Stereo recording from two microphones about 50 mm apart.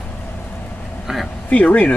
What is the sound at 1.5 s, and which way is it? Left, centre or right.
Speech, left.